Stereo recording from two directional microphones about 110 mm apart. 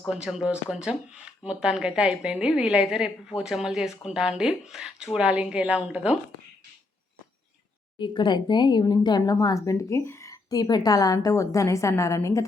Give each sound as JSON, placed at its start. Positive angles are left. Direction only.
{"t": 0.1, "sound": "speech", "side_deg": -5}
{"t": 7.9, "sound": "speech", "side_deg": 45}